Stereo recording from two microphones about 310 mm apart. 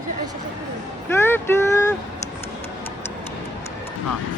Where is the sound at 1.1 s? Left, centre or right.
Centre.